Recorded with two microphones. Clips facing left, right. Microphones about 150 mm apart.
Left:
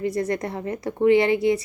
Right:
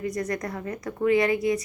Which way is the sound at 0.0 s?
30° left (ahead or behind).